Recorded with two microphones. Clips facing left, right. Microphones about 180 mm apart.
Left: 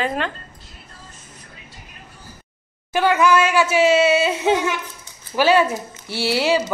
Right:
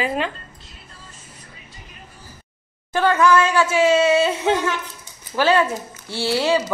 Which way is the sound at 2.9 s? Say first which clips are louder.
Even; 10° left (ahead or behind).